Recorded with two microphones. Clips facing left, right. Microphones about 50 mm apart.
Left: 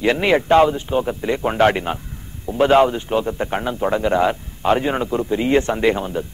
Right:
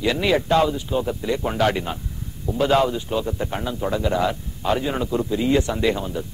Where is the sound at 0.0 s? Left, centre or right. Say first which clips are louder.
Left 4 dB; left.